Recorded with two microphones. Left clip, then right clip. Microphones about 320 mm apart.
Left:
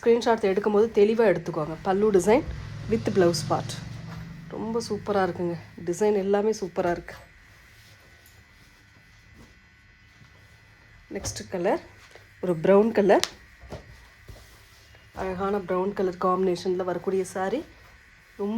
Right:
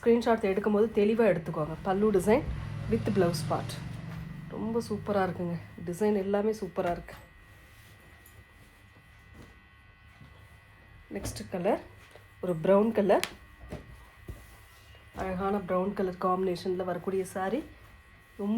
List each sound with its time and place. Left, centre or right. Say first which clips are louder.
0.0 s speech: left 4 dB; left
11.3 s speech: left 3 dB; left
15.1 s speech: left 4 dB; left